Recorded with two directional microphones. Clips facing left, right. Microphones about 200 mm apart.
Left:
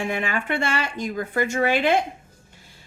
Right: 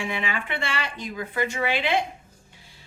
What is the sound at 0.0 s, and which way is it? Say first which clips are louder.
A woman's voice: left 4 dB; 45° left (ahead or behind).